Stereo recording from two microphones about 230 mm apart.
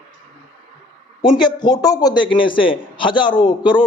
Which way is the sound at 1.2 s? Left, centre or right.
Centre.